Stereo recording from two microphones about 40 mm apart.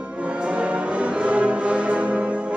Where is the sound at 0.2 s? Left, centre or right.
Right.